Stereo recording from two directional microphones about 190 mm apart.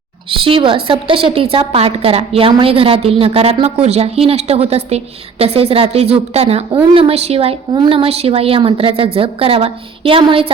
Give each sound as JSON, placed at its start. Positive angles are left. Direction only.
{"t": 0.3, "sound": "a woman's voice", "side_deg": -30}